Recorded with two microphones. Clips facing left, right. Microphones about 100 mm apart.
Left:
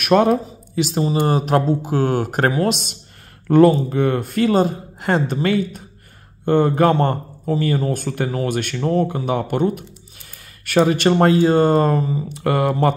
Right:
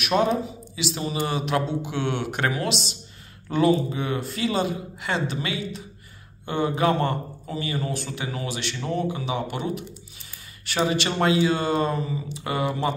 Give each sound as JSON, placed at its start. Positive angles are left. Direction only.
{"t": 0.0, "sound": "speech", "side_deg": 55}
{"t": 1.0, "sound": "a man's voice", "side_deg": 35}